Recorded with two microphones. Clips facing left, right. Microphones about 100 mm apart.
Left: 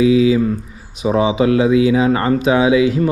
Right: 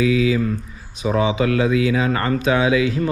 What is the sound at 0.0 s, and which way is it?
Mantra, 25° left (ahead or behind).